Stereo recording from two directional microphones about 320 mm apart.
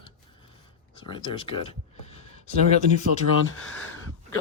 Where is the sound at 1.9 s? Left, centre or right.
Centre.